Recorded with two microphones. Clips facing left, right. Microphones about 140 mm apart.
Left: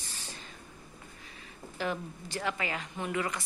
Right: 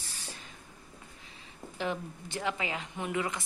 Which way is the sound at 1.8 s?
20° right (ahead or behind).